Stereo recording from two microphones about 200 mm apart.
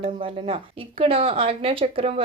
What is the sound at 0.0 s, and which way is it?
Speech, 30° right (ahead or behind).